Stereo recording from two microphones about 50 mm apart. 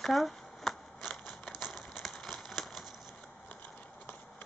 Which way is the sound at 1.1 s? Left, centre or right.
Centre.